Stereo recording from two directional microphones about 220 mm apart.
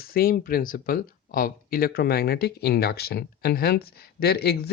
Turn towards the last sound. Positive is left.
turn(degrees=45)  # may be behind; listen again after turning